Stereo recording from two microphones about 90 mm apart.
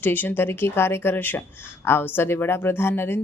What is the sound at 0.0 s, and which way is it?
Speech, 20° left (ahead or behind).